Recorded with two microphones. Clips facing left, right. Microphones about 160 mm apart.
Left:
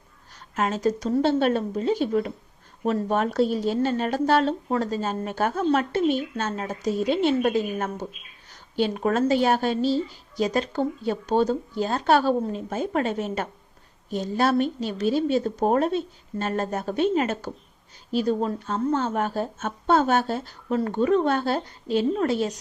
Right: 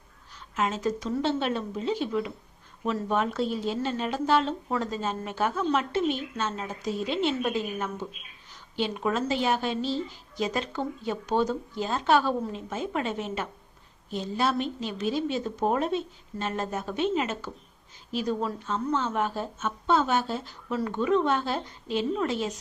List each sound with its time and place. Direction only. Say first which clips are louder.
0.3 s a woman's voice: left 3 dB; 45° left (ahead or behind)
18.1 s a woman's voice: left 5 dB; 35° left (ahead or behind)